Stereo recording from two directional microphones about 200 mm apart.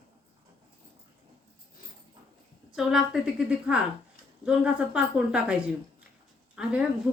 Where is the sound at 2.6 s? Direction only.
5° right (ahead or behind).